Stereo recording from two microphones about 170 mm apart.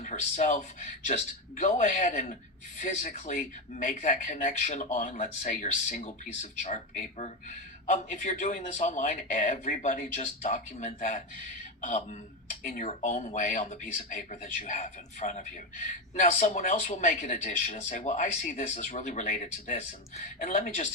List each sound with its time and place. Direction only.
0.0 s a man's voice: 45° left (ahead or behind)